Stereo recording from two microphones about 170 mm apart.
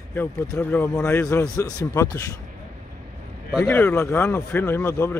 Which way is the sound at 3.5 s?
15° left (ahead or behind).